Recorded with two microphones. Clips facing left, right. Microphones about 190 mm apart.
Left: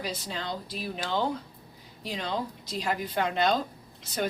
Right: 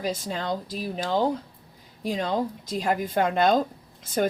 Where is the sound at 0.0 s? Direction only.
50° right (ahead or behind).